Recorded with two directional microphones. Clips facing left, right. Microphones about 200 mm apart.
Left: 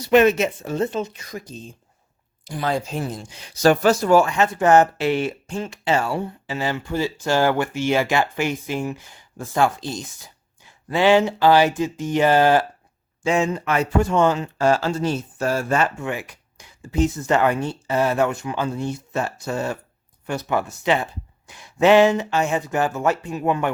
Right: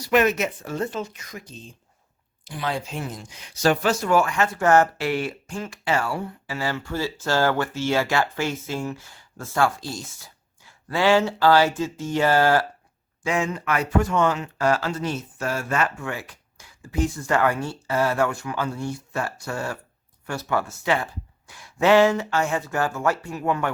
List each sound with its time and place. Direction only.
0.0 s speech: 25° left (ahead or behind)
1.2 s speech: 35° left (ahead or behind); by 23.7 s 20° left (ahead or behind)